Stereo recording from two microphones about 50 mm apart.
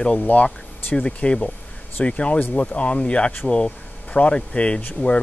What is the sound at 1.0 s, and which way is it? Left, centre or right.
Speech, centre.